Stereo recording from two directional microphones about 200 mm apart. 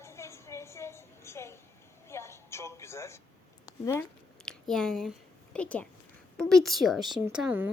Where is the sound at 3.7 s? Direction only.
15° left (ahead or behind).